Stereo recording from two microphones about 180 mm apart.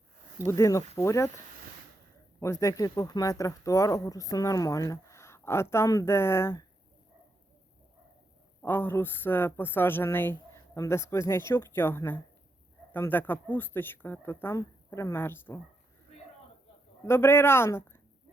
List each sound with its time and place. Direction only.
0.4 s speech: 15° left (ahead or behind)
2.4 s speech: 15° left (ahead or behind)
8.6 s speech: 10° left (ahead or behind)
17.1 s speech: 15° left (ahead or behind)